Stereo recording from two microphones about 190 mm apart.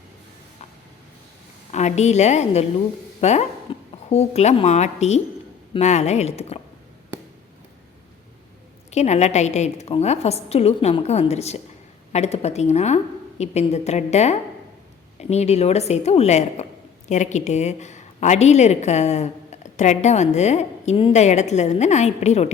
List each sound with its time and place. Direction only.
1.7 s a woman's voice: 35° left (ahead or behind)
8.9 s a woman's voice: 35° left (ahead or behind)